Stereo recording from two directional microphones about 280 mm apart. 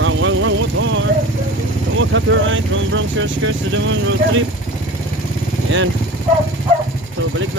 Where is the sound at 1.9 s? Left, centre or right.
Right.